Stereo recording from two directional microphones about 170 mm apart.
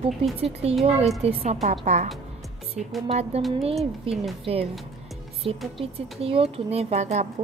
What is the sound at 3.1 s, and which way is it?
Speech, 40° right (ahead or behind).